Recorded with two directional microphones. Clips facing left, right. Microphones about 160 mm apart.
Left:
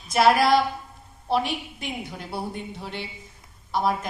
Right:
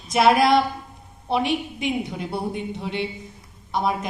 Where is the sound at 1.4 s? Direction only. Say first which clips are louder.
Right 6 dB; 25° right (ahead or behind).